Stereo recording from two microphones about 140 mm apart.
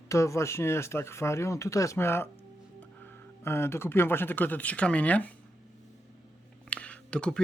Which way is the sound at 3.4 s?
15° left (ahead or behind).